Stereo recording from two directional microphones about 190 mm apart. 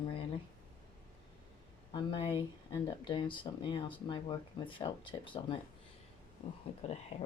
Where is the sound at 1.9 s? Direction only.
25° left (ahead or behind).